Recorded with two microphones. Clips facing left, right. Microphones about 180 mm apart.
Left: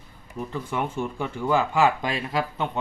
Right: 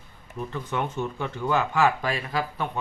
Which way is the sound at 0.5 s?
10° left (ahead or behind).